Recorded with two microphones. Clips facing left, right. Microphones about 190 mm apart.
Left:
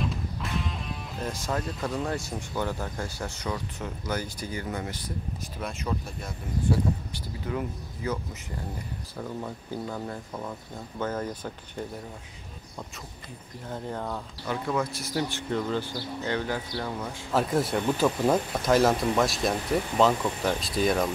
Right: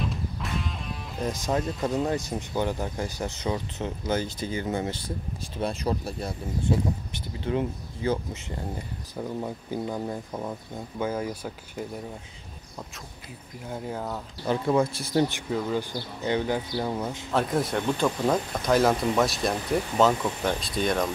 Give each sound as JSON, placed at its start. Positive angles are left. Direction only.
{"t": 0.0, "sound": "music", "side_deg": 0}
{"t": 1.2, "sound": "speech", "side_deg": -20}
{"t": 7.3, "sound": "speech", "side_deg": -25}
{"t": 13.7, "sound": "speech", "side_deg": -5}
{"t": 14.4, "sound": "speech", "side_deg": -30}
{"t": 15.5, "sound": "speech", "side_deg": -15}
{"t": 17.3, "sound": "speech", "side_deg": 0}